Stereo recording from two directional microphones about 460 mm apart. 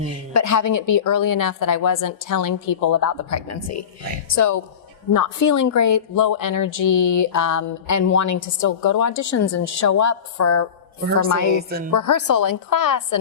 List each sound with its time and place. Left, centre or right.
0.3 s a woman's voice: left